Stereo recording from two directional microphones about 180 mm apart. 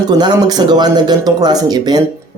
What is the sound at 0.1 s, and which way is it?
Speech, 20° right (ahead or behind).